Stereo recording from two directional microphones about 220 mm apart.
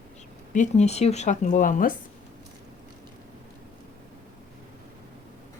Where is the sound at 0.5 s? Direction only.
35° left (ahead or behind).